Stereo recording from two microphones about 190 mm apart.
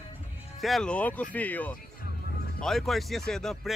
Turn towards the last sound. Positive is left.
turn(degrees=0)  # may be behind; listen again after turning